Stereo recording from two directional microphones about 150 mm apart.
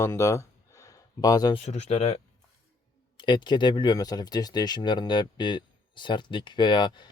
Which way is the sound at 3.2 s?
30° left (ahead or behind).